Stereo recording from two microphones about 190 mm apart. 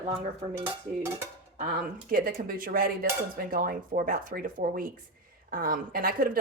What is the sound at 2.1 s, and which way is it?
A woman's voice, 50° right (ahead or behind).